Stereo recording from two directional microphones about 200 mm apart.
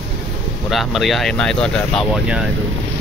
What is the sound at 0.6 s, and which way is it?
Speech, centre (ahead or behind).